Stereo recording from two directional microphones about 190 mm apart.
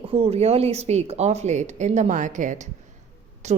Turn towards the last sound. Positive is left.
turn(degrees=-35)  # may be behind; listen again after turning